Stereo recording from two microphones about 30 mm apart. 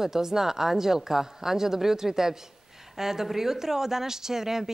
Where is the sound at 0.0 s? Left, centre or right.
Centre.